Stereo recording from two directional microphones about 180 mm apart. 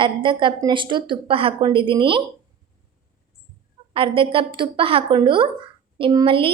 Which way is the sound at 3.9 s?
30° right (ahead or behind).